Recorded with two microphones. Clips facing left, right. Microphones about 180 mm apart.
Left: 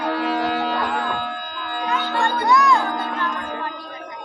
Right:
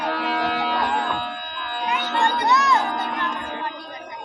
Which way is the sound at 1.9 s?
15° right (ahead or behind).